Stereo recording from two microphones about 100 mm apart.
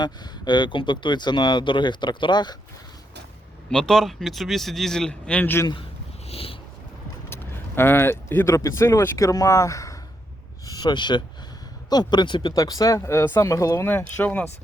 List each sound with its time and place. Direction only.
0.0 s speech: 45° left (ahead or behind)
3.7 s speech: 5° left (ahead or behind)
6.2 s a sound: 75° left (ahead or behind)
7.8 s speech: 20° left (ahead or behind)
10.7 s speech: 45° left (ahead or behind)
12.5 s speech: 40° left (ahead or behind); by 14.4 s 15° left (ahead or behind)